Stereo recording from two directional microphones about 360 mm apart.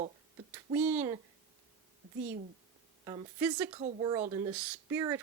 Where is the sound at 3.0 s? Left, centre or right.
Centre.